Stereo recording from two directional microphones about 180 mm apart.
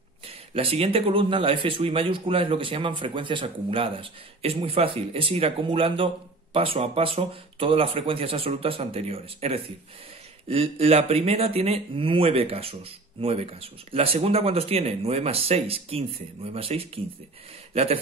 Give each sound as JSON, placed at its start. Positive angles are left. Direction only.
{"t": 0.6, "sound": "speech", "side_deg": -30}